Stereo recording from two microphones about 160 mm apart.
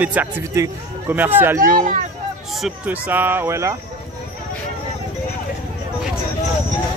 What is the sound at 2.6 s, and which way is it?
Speech, 10° right (ahead or behind).